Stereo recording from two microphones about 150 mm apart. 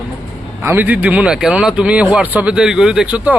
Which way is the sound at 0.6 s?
15° right (ahead or behind).